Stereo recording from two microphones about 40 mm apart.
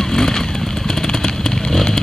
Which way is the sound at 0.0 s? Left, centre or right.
Centre.